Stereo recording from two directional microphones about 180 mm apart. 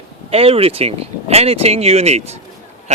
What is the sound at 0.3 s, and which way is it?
Speech, 35° right (ahead or behind).